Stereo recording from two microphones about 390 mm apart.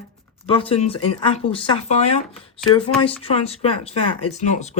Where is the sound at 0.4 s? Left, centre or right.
Centre.